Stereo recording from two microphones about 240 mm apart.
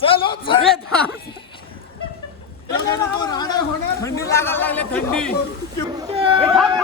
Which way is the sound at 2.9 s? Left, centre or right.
Centre.